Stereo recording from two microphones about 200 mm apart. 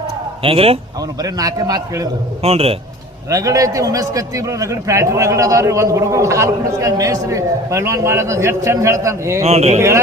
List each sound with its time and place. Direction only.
0.4 s a man's voice: 30° right (ahead or behind)
1.2 s a man's voice: 20° right (ahead or behind)
2.4 s a man's voice: 30° right (ahead or behind)
3.2 s a man's voice: 15° right (ahead or behind)
9.4 s speech: 30° right (ahead or behind)